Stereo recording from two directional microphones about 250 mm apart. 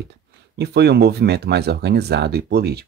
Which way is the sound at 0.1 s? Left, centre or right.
Right.